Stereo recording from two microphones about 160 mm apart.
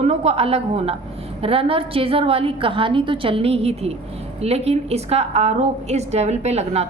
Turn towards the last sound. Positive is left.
turn(degrees=-40)  # may be behind; listen again after turning